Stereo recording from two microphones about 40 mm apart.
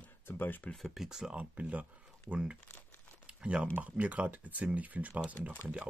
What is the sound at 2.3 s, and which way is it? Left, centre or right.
Speech, right.